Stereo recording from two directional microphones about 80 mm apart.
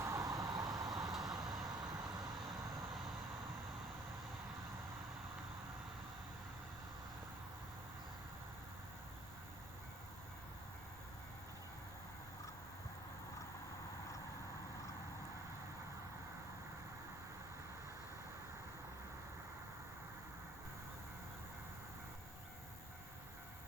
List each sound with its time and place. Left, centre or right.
0.0 s vehicle: right